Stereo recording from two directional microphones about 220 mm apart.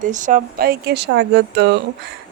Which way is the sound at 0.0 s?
35° right (ahead or behind).